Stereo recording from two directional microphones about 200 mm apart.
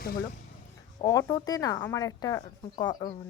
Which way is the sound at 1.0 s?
20° left (ahead or behind).